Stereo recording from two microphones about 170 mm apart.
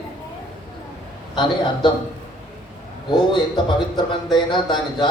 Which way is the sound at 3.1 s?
30° left (ahead or behind).